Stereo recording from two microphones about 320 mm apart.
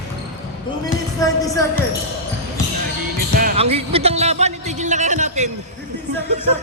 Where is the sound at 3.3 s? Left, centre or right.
Right.